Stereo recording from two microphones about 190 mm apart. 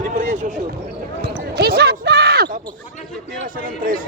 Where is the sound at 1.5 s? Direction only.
60° right (ahead or behind).